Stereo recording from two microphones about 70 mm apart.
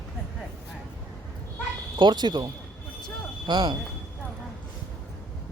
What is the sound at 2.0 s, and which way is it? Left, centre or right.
Speech, right.